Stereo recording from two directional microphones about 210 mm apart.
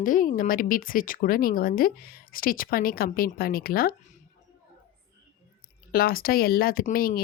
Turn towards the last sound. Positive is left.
turn(degrees=45)  # may be behind; listen again after turning